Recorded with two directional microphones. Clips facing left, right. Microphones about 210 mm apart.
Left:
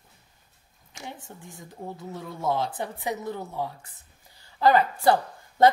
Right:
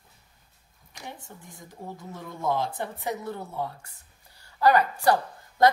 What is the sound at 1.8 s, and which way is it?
A woman's voice, 15° left (ahead or behind).